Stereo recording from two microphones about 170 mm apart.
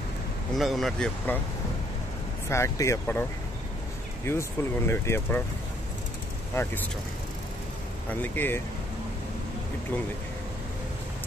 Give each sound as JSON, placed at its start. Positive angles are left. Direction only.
{"t": 0.6, "sound": "speech", "side_deg": 0}
{"t": 2.5, "sound": "speech", "side_deg": 15}
{"t": 4.3, "sound": "speech", "side_deg": 15}
{"t": 6.5, "sound": "speech", "side_deg": 15}
{"t": 8.1, "sound": "speech", "side_deg": 10}